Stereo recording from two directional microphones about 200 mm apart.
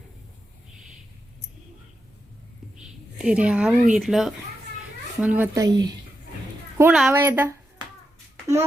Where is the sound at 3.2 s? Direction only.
5° right (ahead or behind).